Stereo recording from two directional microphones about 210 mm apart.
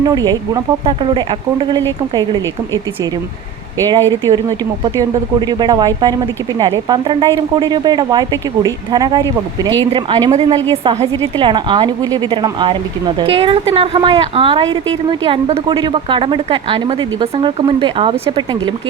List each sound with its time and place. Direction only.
0.0 s a woman's voice: 20° right (ahead or behind)
4.3 s a woman's voice: 15° right (ahead or behind)